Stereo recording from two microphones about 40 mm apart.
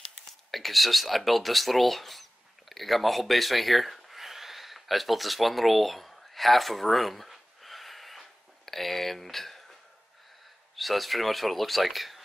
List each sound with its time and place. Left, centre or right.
0.3 s speech: centre
2.7 s a sound: centre
10.8 s speech: centre